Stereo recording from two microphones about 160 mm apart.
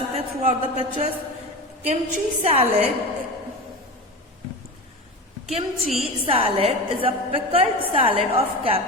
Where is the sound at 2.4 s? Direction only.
40° right (ahead or behind).